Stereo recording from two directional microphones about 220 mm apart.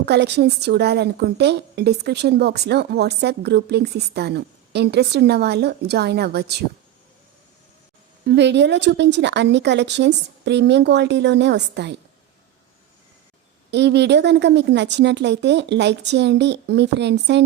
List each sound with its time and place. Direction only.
0.0 s a woman's voice: 50° right (ahead or behind)
8.3 s a woman's voice: 50° right (ahead or behind)
13.7 s a woman's voice: 50° right (ahead or behind)